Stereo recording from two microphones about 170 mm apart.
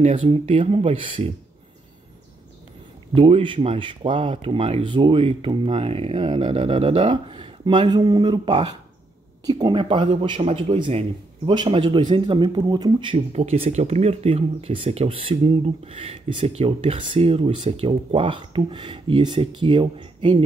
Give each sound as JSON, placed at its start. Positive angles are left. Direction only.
{"t": 0.0, "sound": "speech", "side_deg": -35}
{"t": 3.2, "sound": "speech", "side_deg": -30}